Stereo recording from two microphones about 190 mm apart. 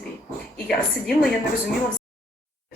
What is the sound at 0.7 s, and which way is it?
A woman's voice, centre (ahead or behind).